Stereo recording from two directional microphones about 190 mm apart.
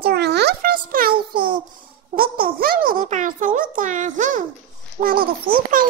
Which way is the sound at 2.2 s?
50° right (ahead or behind).